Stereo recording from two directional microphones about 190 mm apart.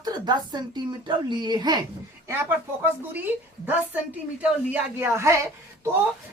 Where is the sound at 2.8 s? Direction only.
10° right (ahead or behind).